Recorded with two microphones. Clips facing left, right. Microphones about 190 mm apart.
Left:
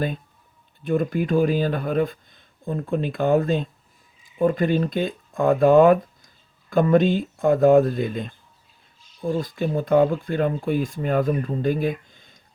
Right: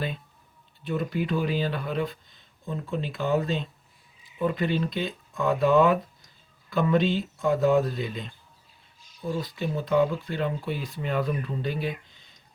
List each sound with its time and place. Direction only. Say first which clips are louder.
0.9 s speech: left 6 dB; 50° left (ahead or behind)